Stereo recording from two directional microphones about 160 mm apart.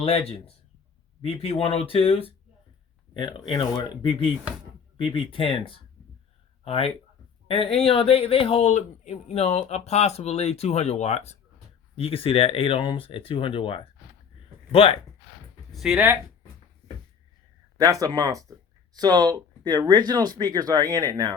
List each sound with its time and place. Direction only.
0.0 s speech: 35° left (ahead or behind)
15.7 s speech: centre (ahead or behind)
17.7 s speech: 20° right (ahead or behind)